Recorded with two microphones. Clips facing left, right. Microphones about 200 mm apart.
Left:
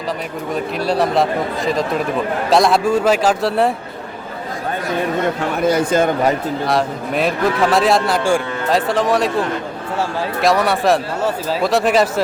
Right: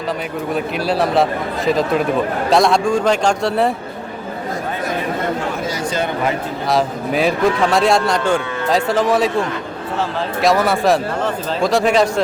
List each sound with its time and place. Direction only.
0.5 s a man's voice: centre (ahead or behind)
5.6 s speech: 55° left (ahead or behind)
6.7 s a man's voice: centre (ahead or behind)